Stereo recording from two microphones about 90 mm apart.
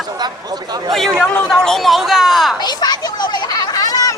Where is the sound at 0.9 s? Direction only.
5° left (ahead or behind).